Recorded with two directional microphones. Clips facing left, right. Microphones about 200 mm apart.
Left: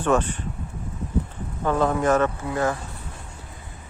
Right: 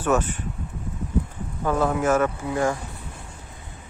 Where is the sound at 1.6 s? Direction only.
5° right (ahead or behind).